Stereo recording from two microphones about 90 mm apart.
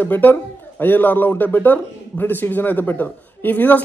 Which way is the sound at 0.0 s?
20° left (ahead or behind).